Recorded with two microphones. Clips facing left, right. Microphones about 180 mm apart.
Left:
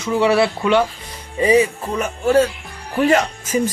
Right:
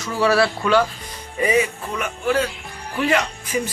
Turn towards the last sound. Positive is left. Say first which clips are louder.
# left 5 dB
turn(degrees=45)  # may be behind; listen again after turning